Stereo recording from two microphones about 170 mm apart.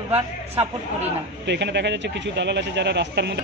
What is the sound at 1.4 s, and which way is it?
Speech, 90° right.